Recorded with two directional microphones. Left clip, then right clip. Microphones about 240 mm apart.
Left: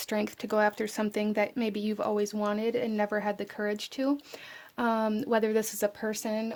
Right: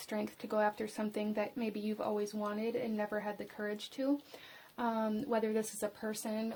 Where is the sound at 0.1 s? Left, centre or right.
Left.